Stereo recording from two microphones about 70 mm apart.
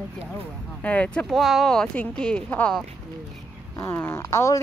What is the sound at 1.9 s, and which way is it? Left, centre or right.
Speech, centre.